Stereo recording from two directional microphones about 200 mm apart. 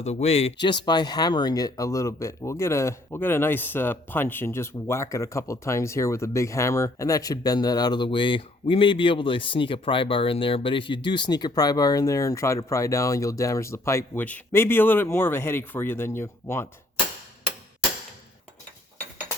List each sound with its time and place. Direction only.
0.0 s speech: 35° left (ahead or behind)
0.9 s speech: 20° left (ahead or behind)